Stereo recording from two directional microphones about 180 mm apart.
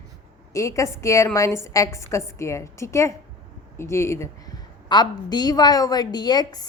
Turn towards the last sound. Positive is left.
turn(degrees=25)  # may be behind; listen again after turning